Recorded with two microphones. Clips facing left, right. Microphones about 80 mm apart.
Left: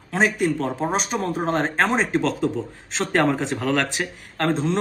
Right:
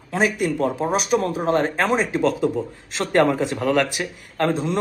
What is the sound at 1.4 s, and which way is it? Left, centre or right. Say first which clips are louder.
Speech: right 3 dB; left.